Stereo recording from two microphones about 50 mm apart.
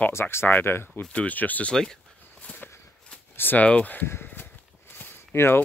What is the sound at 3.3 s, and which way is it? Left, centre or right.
Speech, left.